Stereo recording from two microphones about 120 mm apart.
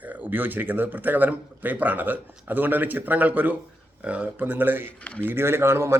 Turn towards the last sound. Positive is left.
turn(degrees=-20)  # may be behind; listen again after turning